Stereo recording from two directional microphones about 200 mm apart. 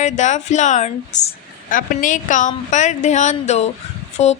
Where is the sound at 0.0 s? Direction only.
35° left (ahead or behind).